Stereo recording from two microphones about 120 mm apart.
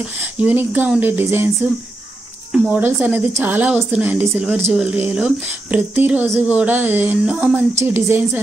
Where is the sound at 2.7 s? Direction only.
15° right (ahead or behind).